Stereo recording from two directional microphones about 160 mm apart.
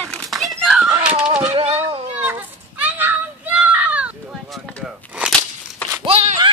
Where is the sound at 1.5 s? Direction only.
35° right (ahead or behind).